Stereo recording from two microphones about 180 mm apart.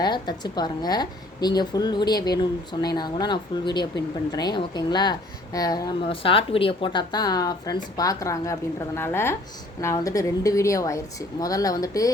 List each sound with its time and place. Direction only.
0.0 s a woman's voice: 25° left (ahead or behind)